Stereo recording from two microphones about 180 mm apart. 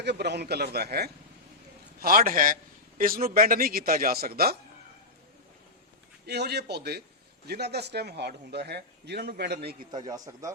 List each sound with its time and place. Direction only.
0.0 s a man's voice: 65° right (ahead or behind)
6.2 s a man's voice: 65° right (ahead or behind)
9.9 s a man's voice: 20° right (ahead or behind)